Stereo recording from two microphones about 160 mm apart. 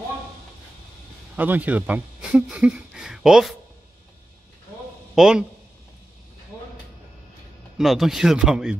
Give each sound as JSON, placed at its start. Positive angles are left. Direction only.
{"t": 1.3, "sound": "speech", "side_deg": -10}
{"t": 5.1, "sound": "speech", "side_deg": -5}
{"t": 6.5, "sound": "a sound", "side_deg": 20}
{"t": 7.7, "sound": "speech", "side_deg": 0}